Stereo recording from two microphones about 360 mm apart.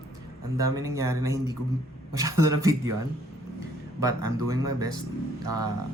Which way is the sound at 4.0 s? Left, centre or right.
Centre.